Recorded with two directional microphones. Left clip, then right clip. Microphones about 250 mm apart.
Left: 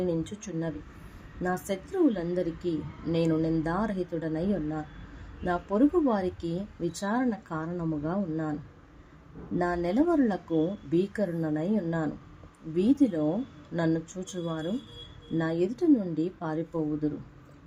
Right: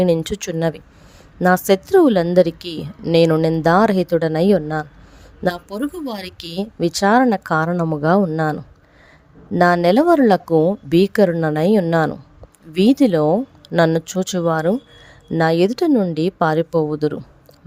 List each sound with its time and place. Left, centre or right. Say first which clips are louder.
0.0 s a woman's voice: right 14 dB; right
5.5 s speech: left 1 dB; centre
6.2 s a woman's voice: right 5 dB; right
9.6 s a woman's voice: right 14 dB; right